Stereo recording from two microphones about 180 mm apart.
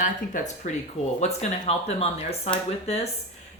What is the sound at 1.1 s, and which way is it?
Speech, 35° left (ahead or behind).